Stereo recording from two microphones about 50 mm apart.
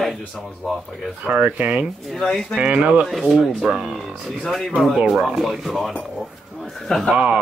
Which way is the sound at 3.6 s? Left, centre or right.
Centre.